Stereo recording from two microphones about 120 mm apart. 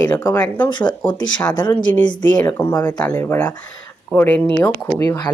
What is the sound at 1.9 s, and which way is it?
Speech, 15° left (ahead or behind).